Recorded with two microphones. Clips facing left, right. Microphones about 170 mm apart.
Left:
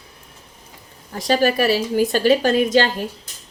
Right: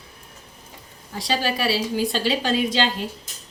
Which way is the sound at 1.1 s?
50° left (ahead or behind).